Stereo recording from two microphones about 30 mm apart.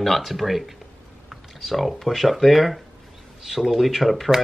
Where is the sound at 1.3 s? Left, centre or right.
Centre.